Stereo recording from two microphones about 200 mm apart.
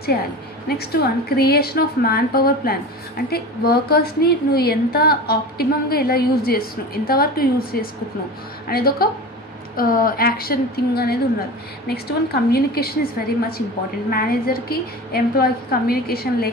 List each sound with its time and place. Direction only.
1.3 s a woman's voice: 50° left (ahead or behind)